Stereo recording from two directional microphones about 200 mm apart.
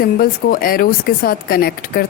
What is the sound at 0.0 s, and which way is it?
Speech, 45° left (ahead or behind).